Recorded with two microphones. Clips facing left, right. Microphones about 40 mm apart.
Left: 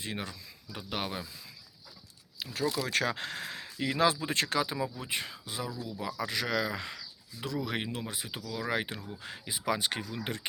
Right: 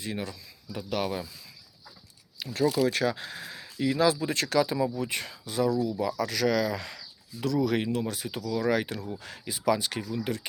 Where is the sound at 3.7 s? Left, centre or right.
Left.